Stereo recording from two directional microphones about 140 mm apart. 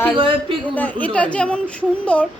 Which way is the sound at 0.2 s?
40° right (ahead or behind).